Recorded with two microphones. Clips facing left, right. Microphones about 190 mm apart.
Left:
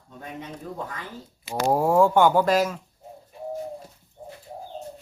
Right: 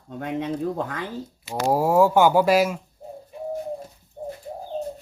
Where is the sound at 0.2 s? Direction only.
75° right (ahead or behind).